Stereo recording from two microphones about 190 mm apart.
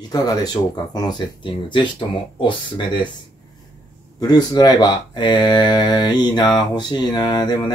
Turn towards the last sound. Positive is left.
turn(degrees=20)  # may be behind; listen again after turning